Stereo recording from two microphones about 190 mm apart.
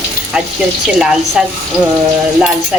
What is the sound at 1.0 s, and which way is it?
Speech, centre (ahead or behind).